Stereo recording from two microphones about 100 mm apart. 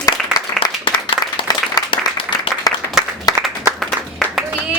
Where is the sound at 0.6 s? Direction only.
55° left (ahead or behind).